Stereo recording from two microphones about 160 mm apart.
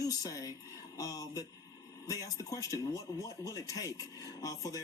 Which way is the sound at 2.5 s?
20° left (ahead or behind).